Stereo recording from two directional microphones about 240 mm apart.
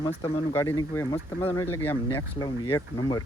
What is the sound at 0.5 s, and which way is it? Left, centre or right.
Speech, centre.